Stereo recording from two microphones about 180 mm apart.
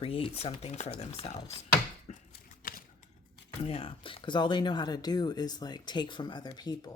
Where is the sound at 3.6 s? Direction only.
30° left (ahead or behind).